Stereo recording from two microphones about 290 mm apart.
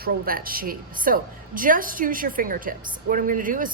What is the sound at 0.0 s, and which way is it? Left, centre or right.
A woman's voice, right.